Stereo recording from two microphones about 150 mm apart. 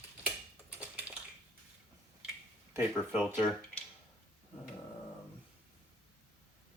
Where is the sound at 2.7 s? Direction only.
15° right (ahead or behind).